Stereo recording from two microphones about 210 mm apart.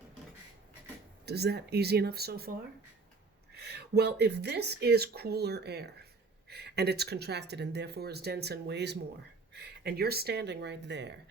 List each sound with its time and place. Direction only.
1.2 s speech: 50° right (ahead or behind)
3.5 s speech: 50° right (ahead or behind)